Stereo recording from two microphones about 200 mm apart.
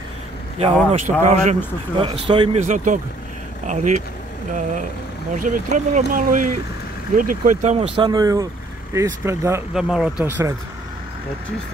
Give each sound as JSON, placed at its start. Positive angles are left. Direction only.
{"t": 0.6, "sound": "speech", "side_deg": -30}
{"t": 2.6, "sound": "speech", "side_deg": -40}
{"t": 9.8, "sound": "speech", "side_deg": -5}